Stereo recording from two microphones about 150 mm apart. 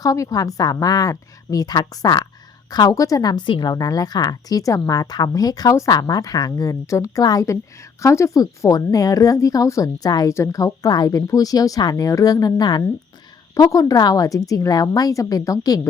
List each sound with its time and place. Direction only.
0.0 s a woman's voice: 25° left (ahead or behind)